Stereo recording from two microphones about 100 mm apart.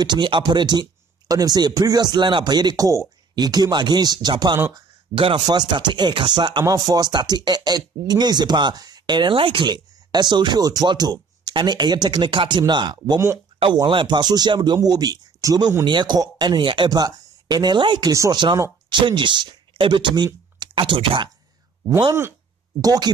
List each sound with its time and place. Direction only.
0.0 s speech: 50° right (ahead or behind)
5.1 s speech: 60° right (ahead or behind)
22.8 s speech: 40° right (ahead or behind)